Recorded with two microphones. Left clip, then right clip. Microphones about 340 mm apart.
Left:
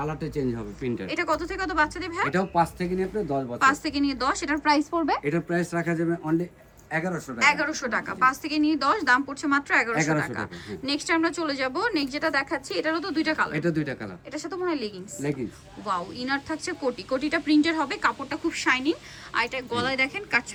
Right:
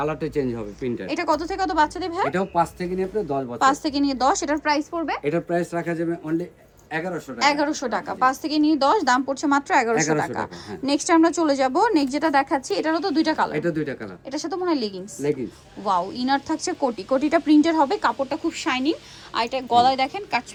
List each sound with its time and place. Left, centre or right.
0.0 s speech: centre
0.8 s speech: centre
1.0 s speech: centre
7.3 s speech: centre
14.3 s speech: centre
15.2 s speech: centre